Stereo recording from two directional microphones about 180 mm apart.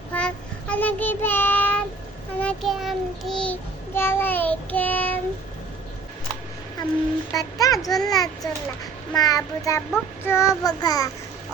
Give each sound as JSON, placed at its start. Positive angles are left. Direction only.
{"t": 0.1, "sound": "child singing", "side_deg": 5}
{"t": 7.3, "sound": "a child's voice", "side_deg": 20}
{"t": 10.2, "sound": "child singing", "side_deg": 15}
{"t": 10.6, "sound": "a child's voice", "side_deg": 20}